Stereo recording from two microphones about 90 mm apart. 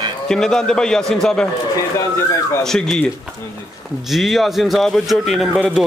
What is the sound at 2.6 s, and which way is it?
Speech, 5° left (ahead or behind).